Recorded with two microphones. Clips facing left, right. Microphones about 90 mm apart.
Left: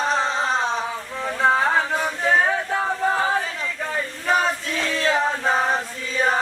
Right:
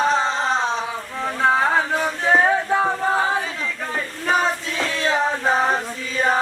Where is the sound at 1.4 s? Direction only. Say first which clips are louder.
Right 1 dB; centre (ahead or behind).